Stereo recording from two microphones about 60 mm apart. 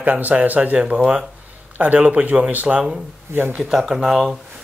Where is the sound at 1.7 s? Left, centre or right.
Right.